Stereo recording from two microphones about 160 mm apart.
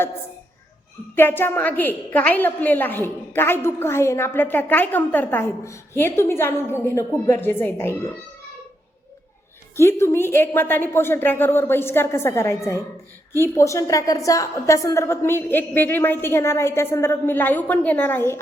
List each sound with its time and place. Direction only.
1.1 s a woman's voice: 15° left (ahead or behind)
9.7 s a woman's voice: 15° left (ahead or behind)